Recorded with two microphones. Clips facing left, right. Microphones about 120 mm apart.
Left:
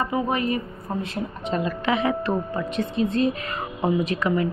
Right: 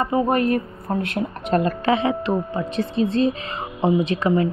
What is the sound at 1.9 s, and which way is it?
A woman's voice, 30° right (ahead or behind).